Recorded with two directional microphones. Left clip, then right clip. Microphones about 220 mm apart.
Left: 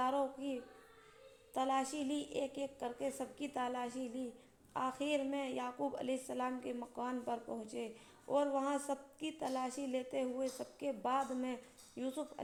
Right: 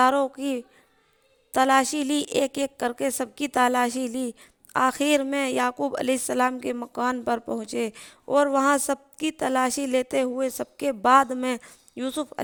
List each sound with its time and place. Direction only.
0.0 s a woman's voice: 50° right (ahead or behind)